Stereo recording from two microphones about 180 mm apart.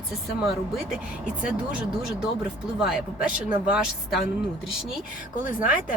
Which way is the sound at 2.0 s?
5° right (ahead or behind).